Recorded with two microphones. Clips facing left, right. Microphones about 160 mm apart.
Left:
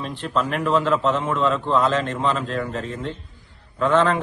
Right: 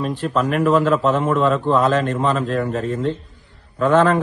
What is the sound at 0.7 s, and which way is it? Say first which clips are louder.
A man's voice: right 3 dB; 50° right (ahead or behind).